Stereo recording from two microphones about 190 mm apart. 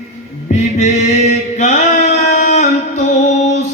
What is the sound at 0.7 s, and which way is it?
Mantra, 40° left (ahead or behind).